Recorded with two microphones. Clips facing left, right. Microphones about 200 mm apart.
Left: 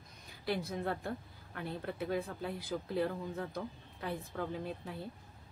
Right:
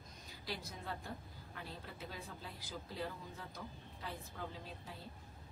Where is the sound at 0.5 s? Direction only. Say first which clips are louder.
Left 10 dB; 60° left (ahead or behind).